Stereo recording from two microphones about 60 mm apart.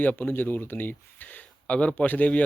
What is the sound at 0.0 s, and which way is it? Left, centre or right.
Speech, left.